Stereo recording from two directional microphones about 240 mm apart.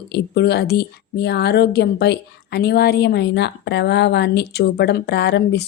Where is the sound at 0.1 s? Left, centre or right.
Left.